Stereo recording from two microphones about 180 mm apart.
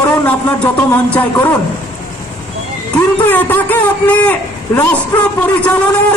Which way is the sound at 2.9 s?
10° left (ahead or behind).